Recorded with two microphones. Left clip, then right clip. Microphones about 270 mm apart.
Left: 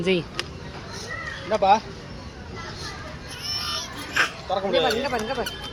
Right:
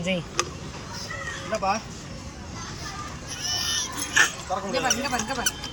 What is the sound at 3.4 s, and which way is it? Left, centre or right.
Pig, centre.